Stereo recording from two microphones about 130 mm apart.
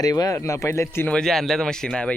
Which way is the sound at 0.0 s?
25° left (ahead or behind).